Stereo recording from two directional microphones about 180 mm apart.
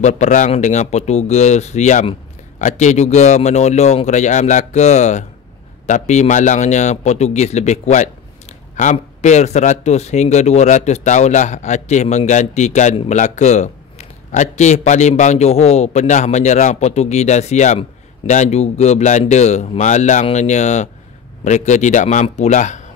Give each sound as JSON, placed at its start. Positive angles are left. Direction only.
{"t": 0.0, "sound": "a man's voice", "side_deg": 45}